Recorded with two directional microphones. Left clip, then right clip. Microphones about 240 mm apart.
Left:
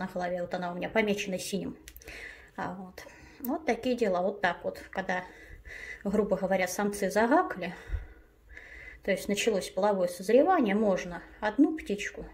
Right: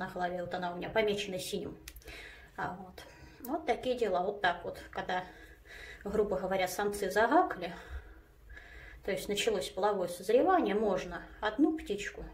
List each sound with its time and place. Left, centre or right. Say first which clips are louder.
0.0 s a woman's voice: left 3 dB; left
9.0 s speech: left 4 dB; left